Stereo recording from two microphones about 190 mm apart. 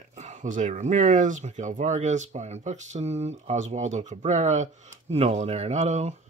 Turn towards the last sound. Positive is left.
turn(degrees=-35)  # may be behind; listen again after turning